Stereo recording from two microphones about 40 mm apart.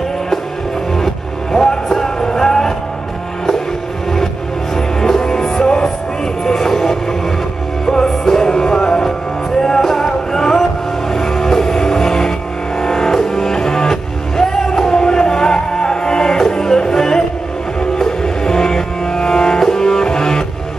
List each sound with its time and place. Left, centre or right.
0.9 s music: centre
4.7 s music: centre